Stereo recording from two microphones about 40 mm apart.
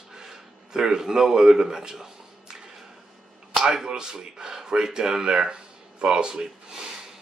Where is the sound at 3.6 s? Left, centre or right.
Right.